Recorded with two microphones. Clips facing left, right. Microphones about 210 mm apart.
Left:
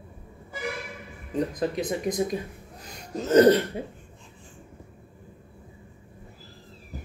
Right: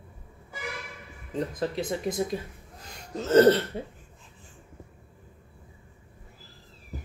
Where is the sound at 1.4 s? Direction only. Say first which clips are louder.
Left 3 dB; 15° left (ahead or behind).